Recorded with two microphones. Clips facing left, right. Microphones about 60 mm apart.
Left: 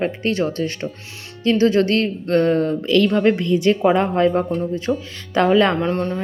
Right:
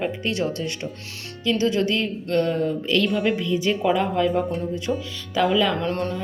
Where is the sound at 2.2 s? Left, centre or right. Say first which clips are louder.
Left 4 dB; left.